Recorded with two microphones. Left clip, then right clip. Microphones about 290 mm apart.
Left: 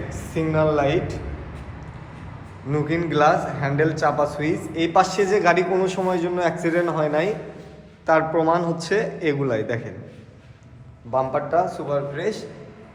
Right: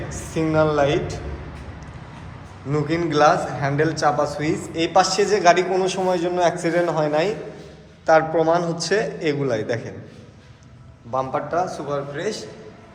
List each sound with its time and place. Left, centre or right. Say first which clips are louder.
0.1 s a woman's voice: right 2 dB; centre
2.6 s a man's voice: right 1 dB; centre
11.1 s a man's voice: left 2 dB; centre